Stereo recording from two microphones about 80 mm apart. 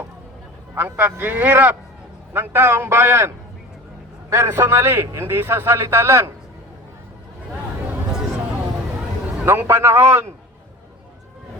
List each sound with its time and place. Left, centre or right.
0.8 s a man's voice: right
9.5 s a man's voice: right